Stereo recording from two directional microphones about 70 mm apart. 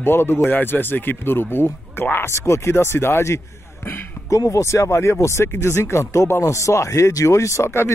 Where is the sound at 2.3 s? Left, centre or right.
Left.